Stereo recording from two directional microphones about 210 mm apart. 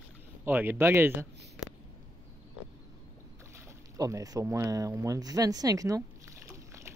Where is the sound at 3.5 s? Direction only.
15° right (ahead or behind).